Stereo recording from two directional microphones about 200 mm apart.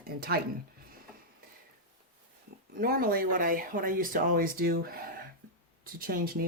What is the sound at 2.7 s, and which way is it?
Speech, 45° right (ahead or behind).